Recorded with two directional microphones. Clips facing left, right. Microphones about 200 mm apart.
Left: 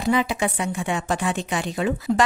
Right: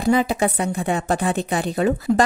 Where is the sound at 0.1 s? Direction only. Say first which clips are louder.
Right 3 dB; 40° right (ahead or behind).